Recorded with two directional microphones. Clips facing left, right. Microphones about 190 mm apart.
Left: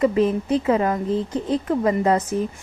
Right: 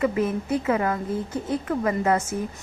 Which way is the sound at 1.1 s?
90° left.